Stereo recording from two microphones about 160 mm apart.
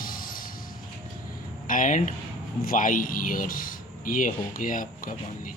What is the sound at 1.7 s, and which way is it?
Speech, 55° left (ahead or behind).